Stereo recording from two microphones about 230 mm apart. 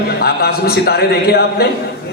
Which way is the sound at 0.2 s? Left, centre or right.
Left.